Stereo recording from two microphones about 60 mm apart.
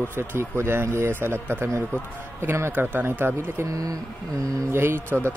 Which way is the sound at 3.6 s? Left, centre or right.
Right.